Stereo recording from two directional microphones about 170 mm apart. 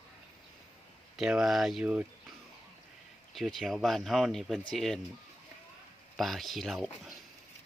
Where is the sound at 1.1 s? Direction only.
5° right (ahead or behind).